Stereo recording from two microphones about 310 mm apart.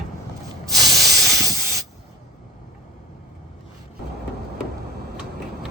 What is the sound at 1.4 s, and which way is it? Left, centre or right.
Spray, centre.